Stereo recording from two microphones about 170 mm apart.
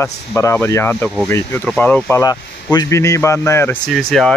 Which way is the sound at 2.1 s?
20° left (ahead or behind).